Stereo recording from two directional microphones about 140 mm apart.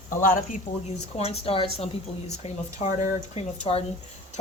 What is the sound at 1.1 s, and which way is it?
Speech, 45° left (ahead or behind).